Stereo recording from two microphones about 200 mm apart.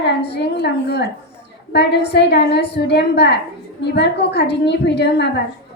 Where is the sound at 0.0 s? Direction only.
55° left (ahead or behind).